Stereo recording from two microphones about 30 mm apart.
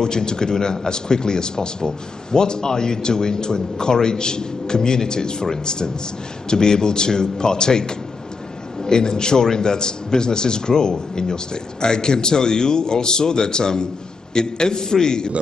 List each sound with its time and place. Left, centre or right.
0.0 s a man's voice: left